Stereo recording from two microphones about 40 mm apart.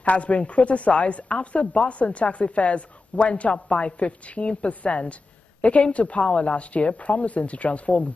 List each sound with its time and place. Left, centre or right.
0.0 s speech: left